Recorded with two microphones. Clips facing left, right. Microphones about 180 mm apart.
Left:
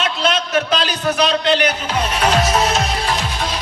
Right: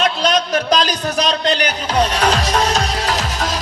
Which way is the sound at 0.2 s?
40° right (ahead or behind).